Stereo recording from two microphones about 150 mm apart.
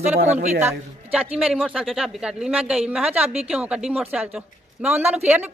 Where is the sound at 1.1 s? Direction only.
5° right (ahead or behind).